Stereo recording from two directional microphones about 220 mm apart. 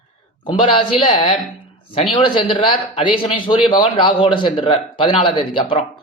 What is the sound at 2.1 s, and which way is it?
A man's voice, 20° left (ahead or behind).